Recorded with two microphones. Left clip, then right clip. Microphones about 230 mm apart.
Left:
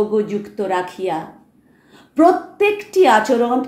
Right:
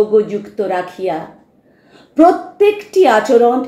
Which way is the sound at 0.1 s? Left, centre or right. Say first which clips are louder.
Right 6 dB; left.